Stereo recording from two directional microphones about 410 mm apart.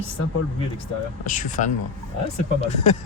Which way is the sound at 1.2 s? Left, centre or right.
Centre.